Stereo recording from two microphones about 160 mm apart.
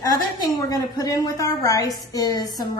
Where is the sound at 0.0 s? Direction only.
20° left (ahead or behind).